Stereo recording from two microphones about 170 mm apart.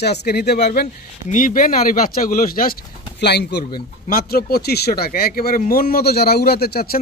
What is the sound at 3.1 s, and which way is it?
Speech, 80° left.